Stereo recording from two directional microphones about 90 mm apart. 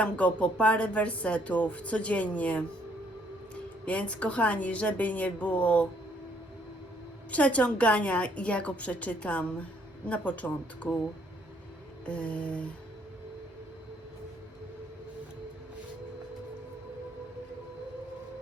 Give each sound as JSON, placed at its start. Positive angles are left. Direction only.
{"t": 0.0, "sound": "speech", "side_deg": 15}
{"t": 3.8, "sound": "speech", "side_deg": 15}
{"t": 7.3, "sound": "speech", "side_deg": 15}
{"t": 12.0, "sound": "speech", "side_deg": 15}